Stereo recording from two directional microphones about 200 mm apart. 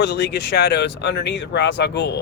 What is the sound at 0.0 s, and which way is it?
Speech, 55° left (ahead or behind).